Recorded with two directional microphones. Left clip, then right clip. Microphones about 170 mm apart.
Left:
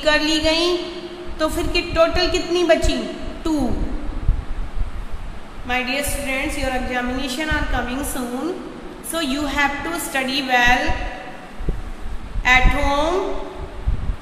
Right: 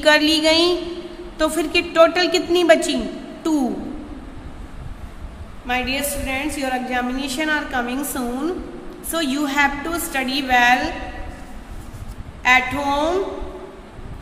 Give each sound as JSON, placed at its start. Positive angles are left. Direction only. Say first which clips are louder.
{"t": 0.0, "sound": "a woman's voice", "louder": "right 3 dB", "side_deg": -25}
{"t": 5.7, "sound": "a woman's voice", "louder": "even", "side_deg": -30}
{"t": 12.4, "sound": "a woman's voice", "louder": "even", "side_deg": -25}